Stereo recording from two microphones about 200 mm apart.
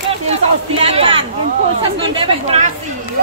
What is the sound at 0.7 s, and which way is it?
Speech, 30° right (ahead or behind).